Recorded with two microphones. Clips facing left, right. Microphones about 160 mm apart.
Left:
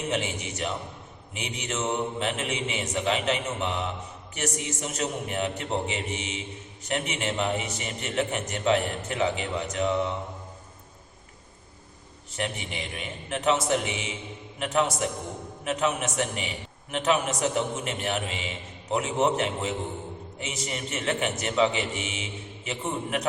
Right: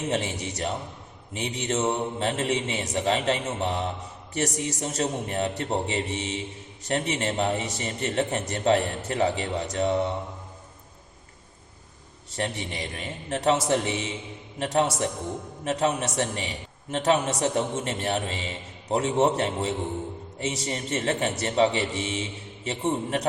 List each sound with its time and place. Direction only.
0.1 s a man's voice: 35° right (ahead or behind)
12.4 s a man's voice: 35° right (ahead or behind)